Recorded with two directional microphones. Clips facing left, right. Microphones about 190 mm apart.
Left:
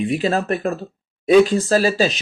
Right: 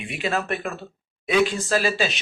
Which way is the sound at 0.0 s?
35° left (ahead or behind).